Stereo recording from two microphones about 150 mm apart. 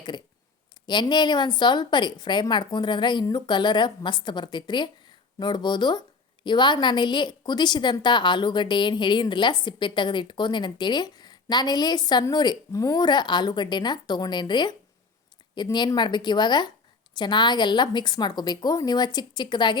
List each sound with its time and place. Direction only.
0.9 s a woman's voice: 30° left (ahead or behind)